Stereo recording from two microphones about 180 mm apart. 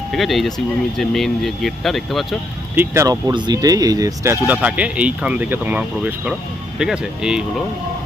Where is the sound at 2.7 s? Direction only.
15° right (ahead or behind).